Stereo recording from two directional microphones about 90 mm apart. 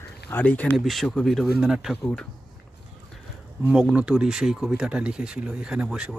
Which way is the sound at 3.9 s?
10° right (ahead or behind).